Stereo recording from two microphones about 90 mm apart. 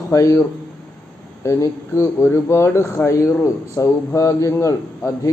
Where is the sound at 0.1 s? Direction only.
35° left (ahead or behind).